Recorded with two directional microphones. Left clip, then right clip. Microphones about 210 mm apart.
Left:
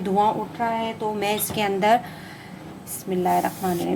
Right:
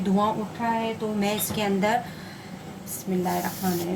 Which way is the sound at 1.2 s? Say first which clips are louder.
Left 3 dB; 40° left (ahead or behind).